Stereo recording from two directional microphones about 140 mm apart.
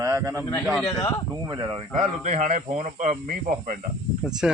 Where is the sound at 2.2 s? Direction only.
60° right (ahead or behind).